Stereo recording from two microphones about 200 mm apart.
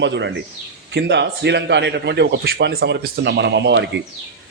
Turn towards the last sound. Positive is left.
turn(degrees=-60)  # may be behind; listen again after turning